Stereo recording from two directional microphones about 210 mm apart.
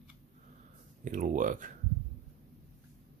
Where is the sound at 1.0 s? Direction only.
35° right (ahead or behind).